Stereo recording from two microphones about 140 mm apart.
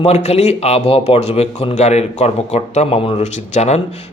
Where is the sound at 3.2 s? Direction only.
55° left (ahead or behind).